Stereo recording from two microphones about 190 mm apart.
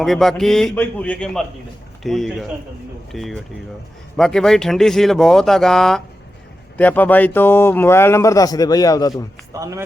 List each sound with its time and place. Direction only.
0.0 s speech: centre (ahead or behind); by 9.2 s 20° left (ahead or behind)
9.5 s speech: 15° right (ahead or behind)